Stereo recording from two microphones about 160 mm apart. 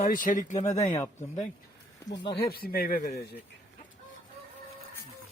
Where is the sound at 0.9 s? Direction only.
20° left (ahead or behind).